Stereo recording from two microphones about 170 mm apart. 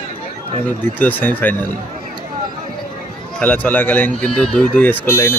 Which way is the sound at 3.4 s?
10° left (ahead or behind).